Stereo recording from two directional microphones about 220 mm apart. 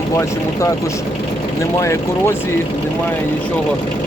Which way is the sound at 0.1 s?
15° left (ahead or behind).